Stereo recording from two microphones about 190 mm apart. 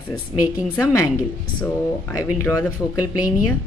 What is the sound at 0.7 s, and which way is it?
Speech, 15° left (ahead or behind).